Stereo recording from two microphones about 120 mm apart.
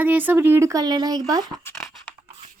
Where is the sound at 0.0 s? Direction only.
15° right (ahead or behind); by 1.6 s 30° right (ahead or behind).